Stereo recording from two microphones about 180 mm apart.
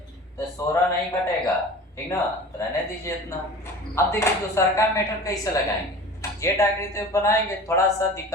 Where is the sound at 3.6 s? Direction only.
15° left (ahead or behind).